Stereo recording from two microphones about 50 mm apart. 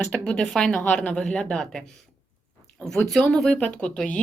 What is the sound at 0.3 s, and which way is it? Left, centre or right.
Speech, centre.